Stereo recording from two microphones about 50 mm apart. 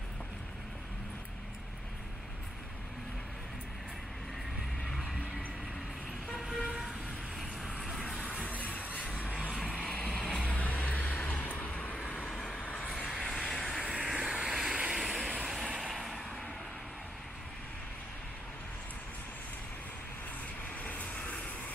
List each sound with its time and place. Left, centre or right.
8.0 s a sound: left
9.5 s vehicle: left
10.4 s vehicle: left
13.1 s vehicle: centre
13.8 s vehicle: centre
20.8 s vehicle: left